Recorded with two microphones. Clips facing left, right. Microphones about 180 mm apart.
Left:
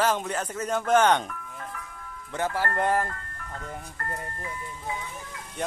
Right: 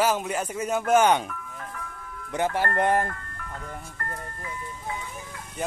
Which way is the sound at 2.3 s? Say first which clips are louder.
Right 3 dB; 20° right (ahead or behind).